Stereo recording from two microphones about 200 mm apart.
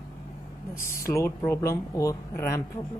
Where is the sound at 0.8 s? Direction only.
15° left (ahead or behind).